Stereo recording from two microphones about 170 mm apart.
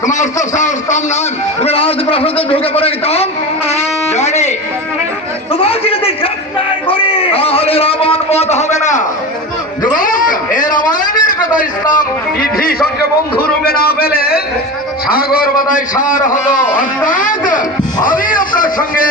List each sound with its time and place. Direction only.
0.0 s a man's voice: 45° left (ahead or behind)
1.6 s a man's voice: 35° left (ahead or behind); by 19.0 s 55° left (ahead or behind)